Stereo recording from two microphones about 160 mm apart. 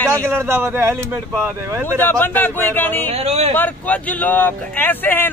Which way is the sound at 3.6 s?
10° left (ahead or behind).